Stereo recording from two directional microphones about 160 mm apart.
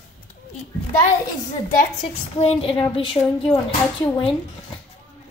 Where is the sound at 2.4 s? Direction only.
35° left (ahead or behind).